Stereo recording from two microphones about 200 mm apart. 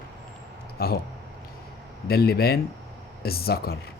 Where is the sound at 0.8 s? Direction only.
50° left (ahead or behind).